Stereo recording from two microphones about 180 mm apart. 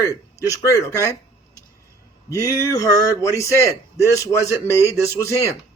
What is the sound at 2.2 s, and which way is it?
Speech, 15° left (ahead or behind).